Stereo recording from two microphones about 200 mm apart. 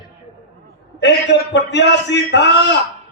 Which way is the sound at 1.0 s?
60° left (ahead or behind).